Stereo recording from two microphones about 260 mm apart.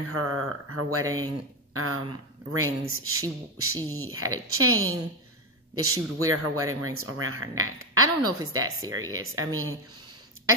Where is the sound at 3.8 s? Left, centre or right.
Centre.